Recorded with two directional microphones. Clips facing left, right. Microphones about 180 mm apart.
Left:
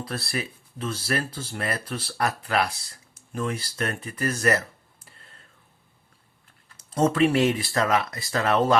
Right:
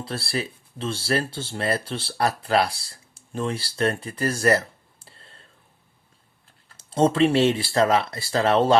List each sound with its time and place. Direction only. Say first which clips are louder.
0.0 s speech: right 2 dB; 30° right (ahead or behind)
6.7 s speech: right 2 dB; 30° right (ahead or behind)